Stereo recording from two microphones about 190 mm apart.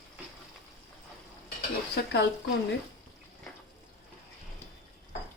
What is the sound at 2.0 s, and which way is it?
Speech, 60° left (ahead or behind).